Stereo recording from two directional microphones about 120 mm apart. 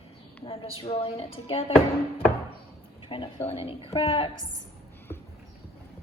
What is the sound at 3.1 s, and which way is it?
A woman's voice, 45° left (ahead or behind).